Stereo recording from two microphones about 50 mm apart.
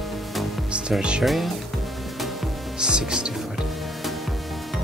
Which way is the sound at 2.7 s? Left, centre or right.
Centre.